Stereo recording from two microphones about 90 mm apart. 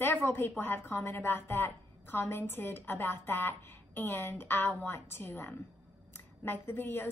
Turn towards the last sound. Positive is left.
turn(degrees=20)  # may be behind; listen again after turning